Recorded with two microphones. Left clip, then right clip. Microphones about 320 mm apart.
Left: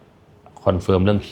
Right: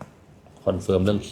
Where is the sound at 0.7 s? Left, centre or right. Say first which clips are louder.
Left 4 dB; left.